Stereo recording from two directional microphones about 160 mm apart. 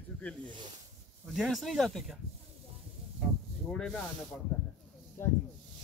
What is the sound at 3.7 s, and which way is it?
Speech, 5° left (ahead or behind).